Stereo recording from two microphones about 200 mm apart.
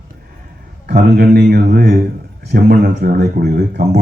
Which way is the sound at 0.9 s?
55° right (ahead or behind).